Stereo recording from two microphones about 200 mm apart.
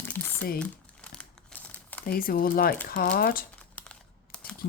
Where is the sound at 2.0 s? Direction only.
45° left (ahead or behind).